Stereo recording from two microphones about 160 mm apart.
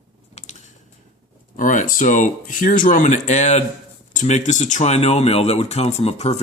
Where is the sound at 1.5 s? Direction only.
55° left (ahead or behind).